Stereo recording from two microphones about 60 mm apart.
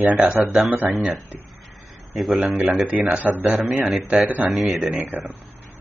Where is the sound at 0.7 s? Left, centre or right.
Right.